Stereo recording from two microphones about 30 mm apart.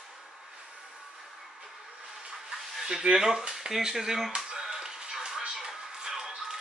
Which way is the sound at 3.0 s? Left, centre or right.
Right.